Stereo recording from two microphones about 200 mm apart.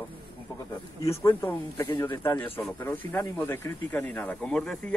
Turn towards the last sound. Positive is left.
turn(degrees=5)  # may be behind; listen again after turning